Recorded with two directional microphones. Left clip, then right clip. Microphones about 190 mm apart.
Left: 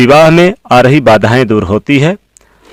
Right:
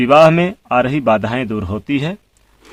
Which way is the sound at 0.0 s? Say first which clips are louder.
Left 5 dB; 45° left (ahead or behind).